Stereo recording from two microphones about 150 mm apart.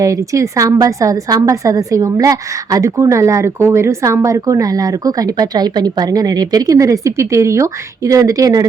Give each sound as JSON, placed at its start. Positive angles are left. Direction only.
{"t": 0.0, "sound": "a woman's voice", "side_deg": -20}